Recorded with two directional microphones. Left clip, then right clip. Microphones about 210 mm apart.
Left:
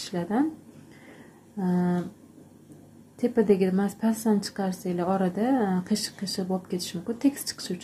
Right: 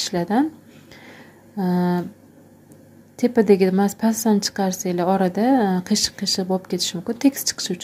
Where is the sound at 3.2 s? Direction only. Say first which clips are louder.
Right 6 dB; 25° right (ahead or behind).